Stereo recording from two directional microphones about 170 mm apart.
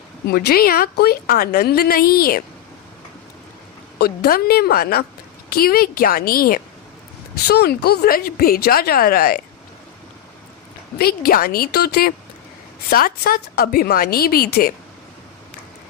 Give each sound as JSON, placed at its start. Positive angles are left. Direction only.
{"t": 0.3, "sound": "a woman's voice", "side_deg": 65}
{"t": 3.9, "sound": "a woman's voice", "side_deg": 65}
{"t": 10.9, "sound": "a woman's voice", "side_deg": 65}